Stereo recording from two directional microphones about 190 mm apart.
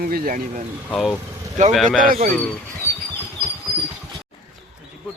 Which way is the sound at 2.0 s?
50° right (ahead or behind).